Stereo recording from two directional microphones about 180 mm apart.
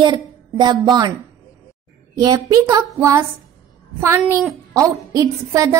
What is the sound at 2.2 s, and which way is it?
A woman's voice, 20° right (ahead or behind).